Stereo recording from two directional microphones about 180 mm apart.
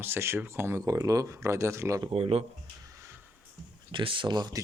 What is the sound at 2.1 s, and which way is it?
Speech, 35° right (ahead or behind).